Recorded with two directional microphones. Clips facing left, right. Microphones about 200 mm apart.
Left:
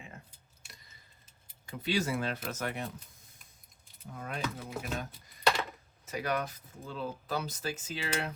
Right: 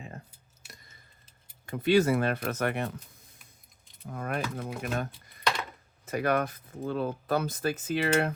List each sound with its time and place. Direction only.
1.6 s speech: 55° right (ahead or behind)
4.0 s speech: 60° right (ahead or behind)